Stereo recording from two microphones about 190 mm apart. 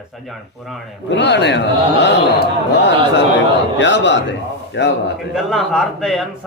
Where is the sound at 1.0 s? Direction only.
70° left (ahead or behind).